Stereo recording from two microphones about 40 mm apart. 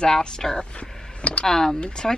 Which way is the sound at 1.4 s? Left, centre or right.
Centre.